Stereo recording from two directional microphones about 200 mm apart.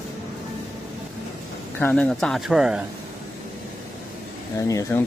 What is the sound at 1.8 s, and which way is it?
Speech, 5° left (ahead or behind).